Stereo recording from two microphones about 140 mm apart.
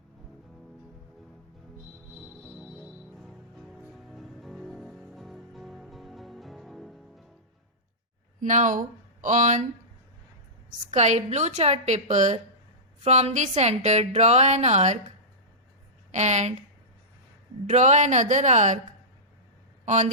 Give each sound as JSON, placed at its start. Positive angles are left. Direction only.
{"t": 2.4, "sound": "music", "side_deg": 0}
{"t": 8.4, "sound": "speech", "side_deg": -65}
{"t": 10.9, "sound": "a woman's voice", "side_deg": -55}
{"t": 16.1, "sound": "a woman's voice", "side_deg": -55}
{"t": 17.7, "sound": "speech", "side_deg": -55}
{"t": 19.8, "sound": "speech", "side_deg": -55}